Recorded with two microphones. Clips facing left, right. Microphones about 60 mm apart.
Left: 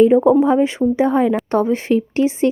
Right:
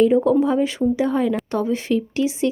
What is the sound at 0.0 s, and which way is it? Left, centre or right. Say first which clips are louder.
A woman's voice: left 4 dB; left.